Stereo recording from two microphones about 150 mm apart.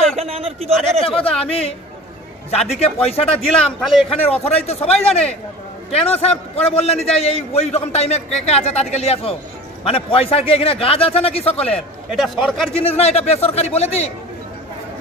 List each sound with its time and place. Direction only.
0.2 s a man's voice: 40° right (ahead or behind)
1.0 s a man's voice: 5° left (ahead or behind)
2.5 s a man's voice: 45° left (ahead or behind)
12.1 s a man's voice: centre (ahead or behind)
12.7 s a man's voice: 40° left (ahead or behind)